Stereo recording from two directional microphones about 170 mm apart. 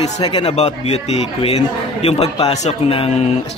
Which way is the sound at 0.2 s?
25° left (ahead or behind).